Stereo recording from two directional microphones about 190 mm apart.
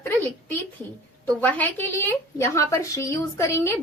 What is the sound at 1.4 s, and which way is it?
A woman's voice, 10° left (ahead or behind).